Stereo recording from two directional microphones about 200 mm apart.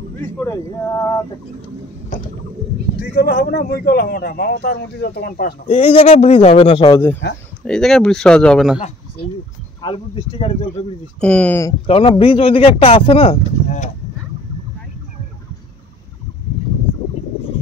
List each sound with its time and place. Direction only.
0.5 s speech: 10° left (ahead or behind)
3.0 s a man's voice: 55° left (ahead or behind)
5.7 s a man's voice: 30° left (ahead or behind)
7.6 s speech: 5° left (ahead or behind)
9.8 s speech: 25° left (ahead or behind)
11.1 s speech: 5° left (ahead or behind)
11.8 s speech: 25° left (ahead or behind)